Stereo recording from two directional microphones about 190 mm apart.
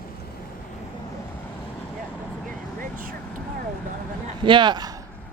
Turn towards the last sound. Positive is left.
turn(degrees=-20)  # may be behind; listen again after turning